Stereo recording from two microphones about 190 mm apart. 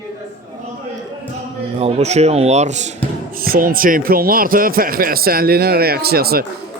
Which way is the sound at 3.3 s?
50° right (ahead or behind).